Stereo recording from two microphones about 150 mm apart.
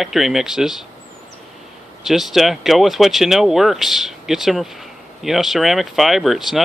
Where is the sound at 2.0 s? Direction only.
Centre (ahead or behind).